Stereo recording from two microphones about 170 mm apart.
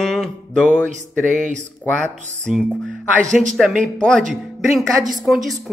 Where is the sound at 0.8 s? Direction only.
45° right (ahead or behind).